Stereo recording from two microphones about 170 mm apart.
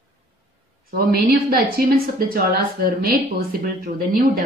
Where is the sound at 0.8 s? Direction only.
60° right (ahead or behind).